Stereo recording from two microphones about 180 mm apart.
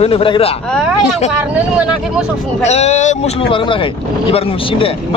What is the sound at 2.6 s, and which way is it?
Speech, 40° left (ahead or behind).